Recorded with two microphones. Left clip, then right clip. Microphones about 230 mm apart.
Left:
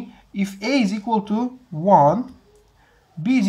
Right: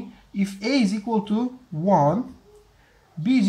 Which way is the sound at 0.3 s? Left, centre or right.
Centre.